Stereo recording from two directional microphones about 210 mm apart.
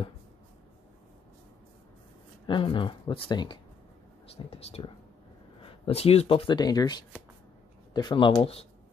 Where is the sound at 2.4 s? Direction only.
25° left (ahead or behind).